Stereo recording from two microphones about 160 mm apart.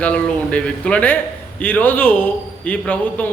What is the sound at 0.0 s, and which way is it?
A man's voice, 10° left (ahead or behind).